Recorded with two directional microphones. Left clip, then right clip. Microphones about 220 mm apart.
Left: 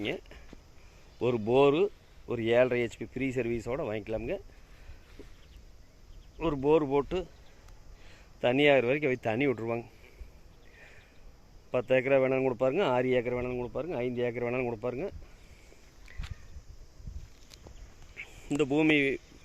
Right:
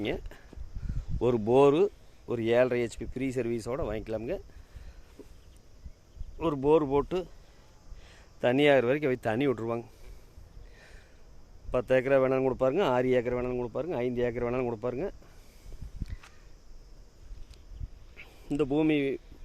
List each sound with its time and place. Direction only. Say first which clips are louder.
0.0 s speech: right 1 dB; 15° right (ahead or behind)
5.2 s a sound: right 1 dB; 10° right (ahead or behind)
6.4 s speech: right 1 dB; 10° right (ahead or behind)
11.7 s speech: right 1 dB; 15° right (ahead or behind)
18.2 s speech: even; 5° right (ahead or behind)